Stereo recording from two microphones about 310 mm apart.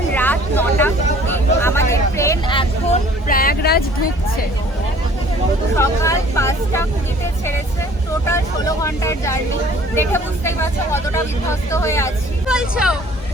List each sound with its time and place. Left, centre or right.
0.1 s vehicle: centre
1.6 s hubbub: centre; by 3.8 s left
5.7 s speech: centre
8.3 s speech: centre
12.5 s speech: centre